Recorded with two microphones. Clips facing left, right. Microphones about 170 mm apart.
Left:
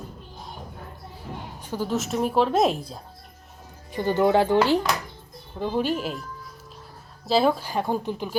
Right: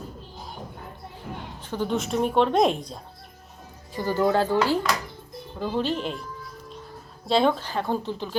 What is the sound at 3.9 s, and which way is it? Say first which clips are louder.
Speech: left 2 dB; 20° left (ahead or behind).